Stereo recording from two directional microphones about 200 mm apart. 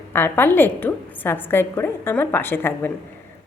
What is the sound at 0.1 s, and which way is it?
A woman's voice, 10° left (ahead or behind).